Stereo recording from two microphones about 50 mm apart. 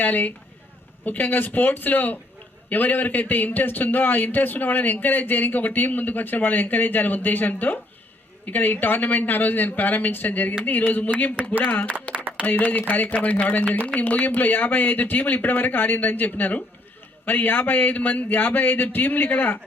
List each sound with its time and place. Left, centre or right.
0.0 s a man's voice: left
12.1 s music: left
12.5 s a man's voice: left